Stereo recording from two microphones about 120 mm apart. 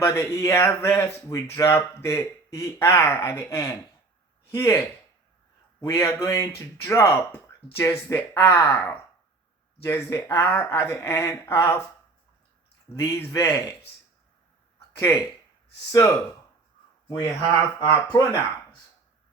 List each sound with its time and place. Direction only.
0.0 s speech: 20° left (ahead or behind)
12.9 s speech: 20° left (ahead or behind)
15.1 s speech: 25° left (ahead or behind)
17.7 s speech: 35° left (ahead or behind)